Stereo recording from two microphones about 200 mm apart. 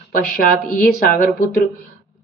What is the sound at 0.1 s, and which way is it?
Speech, 45° left (ahead or behind).